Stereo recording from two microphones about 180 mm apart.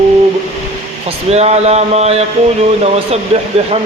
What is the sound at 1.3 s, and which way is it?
Speech, 35° right (ahead or behind).